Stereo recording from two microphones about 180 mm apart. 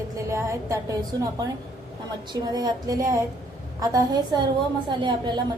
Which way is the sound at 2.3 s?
20° right (ahead or behind).